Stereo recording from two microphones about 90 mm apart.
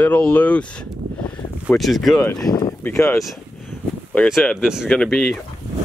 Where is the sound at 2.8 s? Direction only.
30° left (ahead or behind).